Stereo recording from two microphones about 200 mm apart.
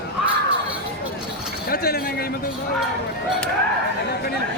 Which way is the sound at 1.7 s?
50° left (ahead or behind).